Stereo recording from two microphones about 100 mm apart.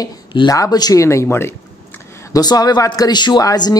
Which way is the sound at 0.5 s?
40° left (ahead or behind).